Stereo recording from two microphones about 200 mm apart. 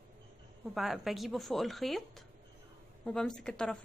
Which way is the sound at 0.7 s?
Centre (ahead or behind).